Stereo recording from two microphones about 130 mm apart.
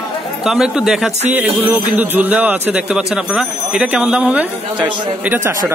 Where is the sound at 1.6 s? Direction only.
15° right (ahead or behind).